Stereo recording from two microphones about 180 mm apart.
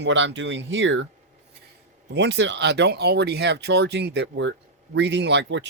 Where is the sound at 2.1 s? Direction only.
75° right (ahead or behind).